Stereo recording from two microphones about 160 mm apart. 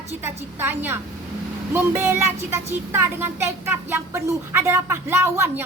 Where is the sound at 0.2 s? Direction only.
15° right (ahead or behind).